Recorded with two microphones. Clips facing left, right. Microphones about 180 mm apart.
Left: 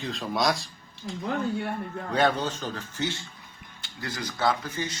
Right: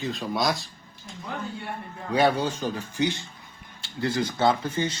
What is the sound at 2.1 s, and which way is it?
Speech, 10° right (ahead or behind).